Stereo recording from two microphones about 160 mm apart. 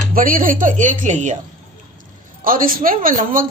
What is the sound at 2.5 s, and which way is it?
A woman's voice, 60° right (ahead or behind).